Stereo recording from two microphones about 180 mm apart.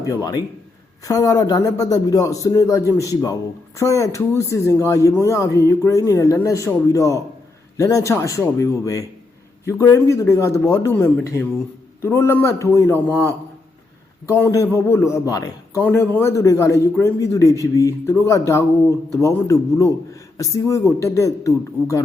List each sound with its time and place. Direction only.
0.0 s a man's voice: 20° left (ahead or behind)